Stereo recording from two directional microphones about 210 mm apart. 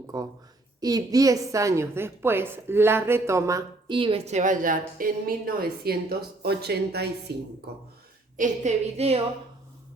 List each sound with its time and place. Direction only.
0.1 s a woman's voice: 15° right (ahead or behind); by 7.8 s 50° right (ahead or behind)
8.4 s a woman's voice: 30° right (ahead or behind)